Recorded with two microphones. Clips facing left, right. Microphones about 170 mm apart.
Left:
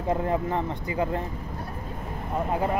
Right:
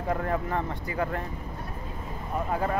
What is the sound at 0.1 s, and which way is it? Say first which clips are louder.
Speech: left 3 dB; 20° left (ahead or behind).